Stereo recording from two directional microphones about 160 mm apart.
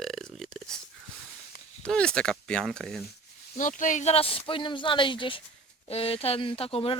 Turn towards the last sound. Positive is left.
turn(degrees=35)  # may be behind; listen again after turning